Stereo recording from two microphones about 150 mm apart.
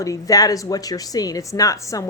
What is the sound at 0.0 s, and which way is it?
Speech, 25° left (ahead or behind).